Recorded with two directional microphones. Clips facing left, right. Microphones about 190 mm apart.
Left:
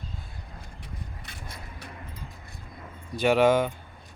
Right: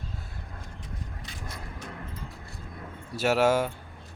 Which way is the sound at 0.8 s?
60° left (ahead or behind).